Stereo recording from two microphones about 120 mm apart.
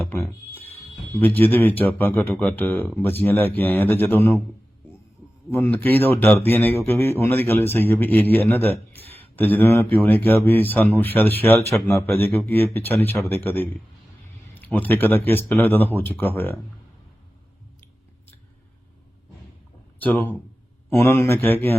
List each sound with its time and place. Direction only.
0.3 s speech: 15° left (ahead or behind)
5.5 s speech: 20° left (ahead or behind)
20.0 s speech: 15° left (ahead or behind)